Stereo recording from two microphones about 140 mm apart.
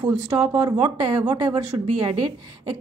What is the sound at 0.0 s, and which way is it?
A woman's voice, 20° right (ahead or behind).